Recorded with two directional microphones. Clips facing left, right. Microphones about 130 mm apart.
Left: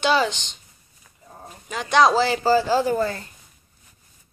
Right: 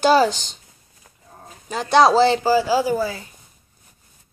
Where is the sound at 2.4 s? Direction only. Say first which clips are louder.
Right 1 dB; 10° right (ahead or behind).